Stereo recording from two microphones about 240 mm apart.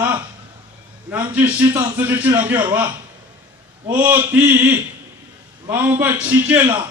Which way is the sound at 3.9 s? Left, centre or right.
Centre.